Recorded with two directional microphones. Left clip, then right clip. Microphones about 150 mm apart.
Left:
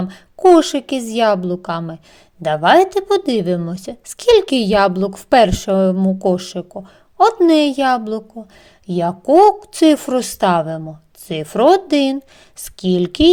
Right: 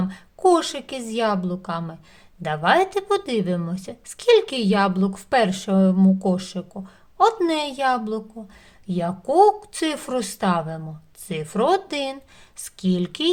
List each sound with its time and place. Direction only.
0.0 s a woman's voice: 30° left (ahead or behind)